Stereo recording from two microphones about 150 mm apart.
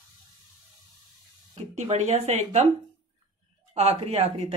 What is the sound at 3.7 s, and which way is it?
Speech, 45° right (ahead or behind).